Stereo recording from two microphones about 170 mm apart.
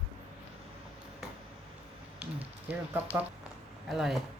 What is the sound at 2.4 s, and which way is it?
Rain on surface, 10° right (ahead or behind).